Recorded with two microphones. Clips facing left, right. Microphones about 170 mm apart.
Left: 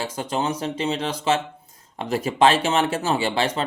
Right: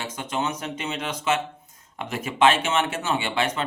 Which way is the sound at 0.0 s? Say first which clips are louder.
Left 3 dB; 35° left (ahead or behind).